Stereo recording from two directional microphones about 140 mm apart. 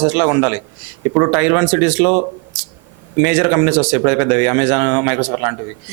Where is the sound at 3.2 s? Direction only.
15° right (ahead or behind).